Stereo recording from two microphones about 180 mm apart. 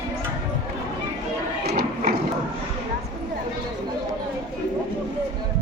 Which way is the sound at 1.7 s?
60° right (ahead or behind).